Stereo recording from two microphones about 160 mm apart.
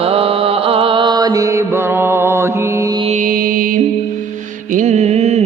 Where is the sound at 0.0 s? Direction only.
35° right (ahead or behind); by 2.5 s 15° right (ahead or behind).